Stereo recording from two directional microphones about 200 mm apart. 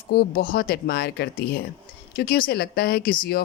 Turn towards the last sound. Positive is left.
turn(degrees=45)  # may be behind; listen again after turning